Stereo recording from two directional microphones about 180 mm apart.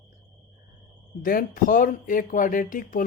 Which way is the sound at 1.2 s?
50° left (ahead or behind).